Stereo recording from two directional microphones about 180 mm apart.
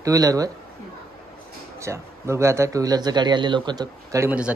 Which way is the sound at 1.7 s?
15° right (ahead or behind).